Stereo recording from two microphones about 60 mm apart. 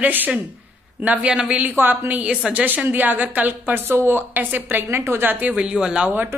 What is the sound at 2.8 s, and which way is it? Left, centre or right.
A woman's voice, right.